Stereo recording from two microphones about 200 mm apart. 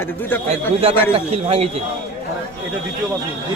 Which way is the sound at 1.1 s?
30° right (ahead or behind).